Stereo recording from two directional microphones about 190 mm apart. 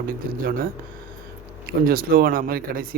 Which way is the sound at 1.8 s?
50° right (ahead or behind).